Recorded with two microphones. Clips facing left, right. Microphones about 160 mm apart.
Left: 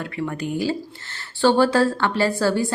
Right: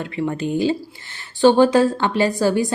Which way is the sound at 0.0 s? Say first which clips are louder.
Right 4 dB; 25° right (ahead or behind).